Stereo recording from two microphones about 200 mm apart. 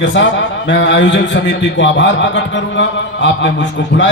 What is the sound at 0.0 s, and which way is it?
A man's voice, 65° left (ahead or behind).